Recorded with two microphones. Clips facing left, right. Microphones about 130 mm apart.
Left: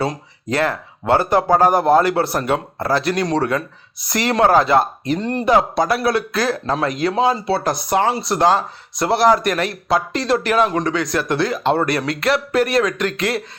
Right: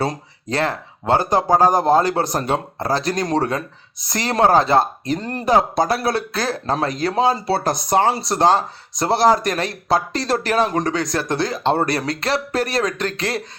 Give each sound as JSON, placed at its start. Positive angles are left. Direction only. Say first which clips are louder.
{"t": 0.5, "sound": "speech", "louder": "left 2 dB", "side_deg": -25}
{"t": 1.2, "sound": "speech", "louder": "left 2 dB", "side_deg": -35}
{"t": 1.5, "sound": "speech", "louder": "even", "side_deg": -15}
{"t": 2.4, "sound": "speech", "louder": "left 1 dB", "side_deg": -30}